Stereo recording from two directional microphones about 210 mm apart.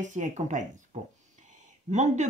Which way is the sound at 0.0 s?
35° right (ahead or behind).